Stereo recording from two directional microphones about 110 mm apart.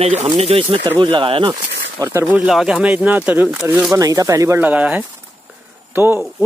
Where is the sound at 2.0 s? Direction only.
25° right (ahead or behind).